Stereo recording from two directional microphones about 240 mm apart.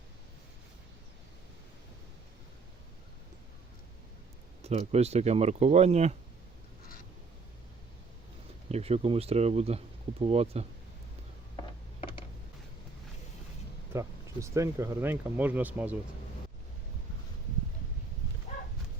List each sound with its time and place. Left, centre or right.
4.6 s speech: right
8.7 s speech: right
13.9 s speech: centre